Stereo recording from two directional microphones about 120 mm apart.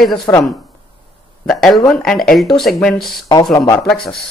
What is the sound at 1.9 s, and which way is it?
Speech, 5° left (ahead or behind).